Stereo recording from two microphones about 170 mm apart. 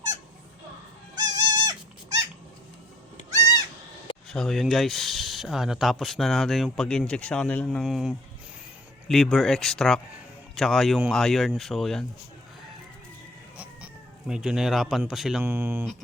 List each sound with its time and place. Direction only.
1.3 s dog: 20° right (ahead or behind)
4.3 s speech: centre (ahead or behind)
13.6 s speech: 5° right (ahead or behind)
15.4 s speech: 15° right (ahead or behind)